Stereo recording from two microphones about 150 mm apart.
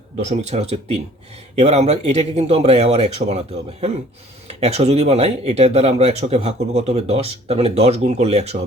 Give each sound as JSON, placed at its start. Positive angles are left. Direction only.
{"t": 0.2, "sound": "speech", "side_deg": -50}